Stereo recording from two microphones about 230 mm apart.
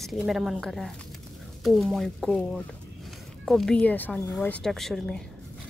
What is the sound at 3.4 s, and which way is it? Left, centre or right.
Speech, centre.